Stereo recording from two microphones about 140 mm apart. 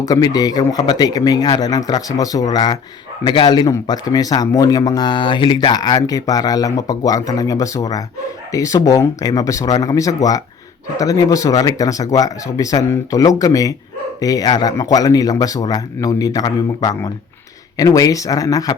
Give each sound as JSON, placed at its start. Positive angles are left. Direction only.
{"t": 0.0, "sound": "speech", "side_deg": 25}